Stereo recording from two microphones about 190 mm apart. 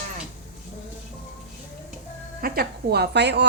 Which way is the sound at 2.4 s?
50° right (ahead or behind).